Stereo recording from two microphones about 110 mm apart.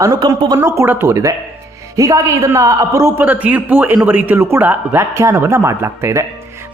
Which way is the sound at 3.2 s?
15° right (ahead or behind).